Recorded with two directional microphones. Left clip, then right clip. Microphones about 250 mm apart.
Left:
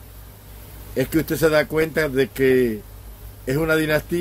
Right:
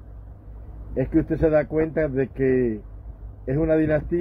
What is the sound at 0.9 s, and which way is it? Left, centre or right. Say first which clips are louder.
Speech: left 1 dB; centre.